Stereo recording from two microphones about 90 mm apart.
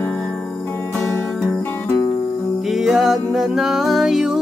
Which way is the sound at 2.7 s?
5° right (ahead or behind).